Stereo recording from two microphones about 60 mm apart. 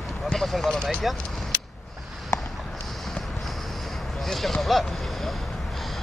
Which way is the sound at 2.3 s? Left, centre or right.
Left.